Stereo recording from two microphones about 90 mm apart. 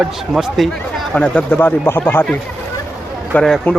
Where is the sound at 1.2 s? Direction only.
15° left (ahead or behind).